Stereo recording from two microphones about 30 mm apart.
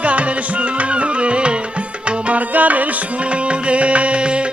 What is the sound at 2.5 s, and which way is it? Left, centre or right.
Music, right.